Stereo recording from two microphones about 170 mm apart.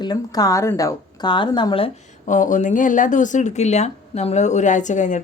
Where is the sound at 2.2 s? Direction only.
50° left (ahead or behind).